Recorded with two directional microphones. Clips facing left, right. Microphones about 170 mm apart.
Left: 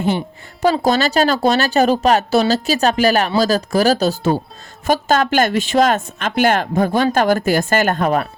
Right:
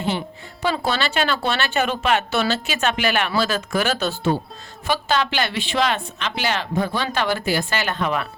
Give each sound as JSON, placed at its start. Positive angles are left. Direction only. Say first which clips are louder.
{"t": 0.6, "sound": "speech", "louder": "left 7 dB", "side_deg": 40}